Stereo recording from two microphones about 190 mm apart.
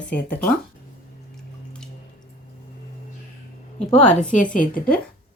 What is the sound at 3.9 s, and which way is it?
A woman's voice, 35° left (ahead or behind).